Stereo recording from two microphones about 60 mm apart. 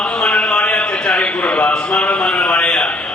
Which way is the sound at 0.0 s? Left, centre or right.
Centre.